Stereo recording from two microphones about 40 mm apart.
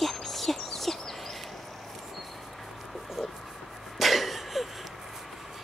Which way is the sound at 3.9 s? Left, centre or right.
Centre.